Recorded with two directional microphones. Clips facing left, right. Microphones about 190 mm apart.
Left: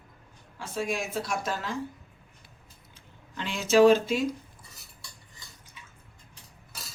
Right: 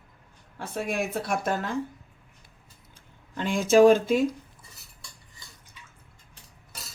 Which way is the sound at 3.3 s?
50° right (ahead or behind).